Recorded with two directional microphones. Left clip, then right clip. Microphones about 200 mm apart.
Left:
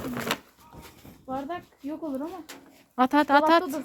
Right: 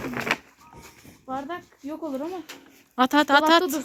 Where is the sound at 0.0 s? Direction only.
20° right (ahead or behind).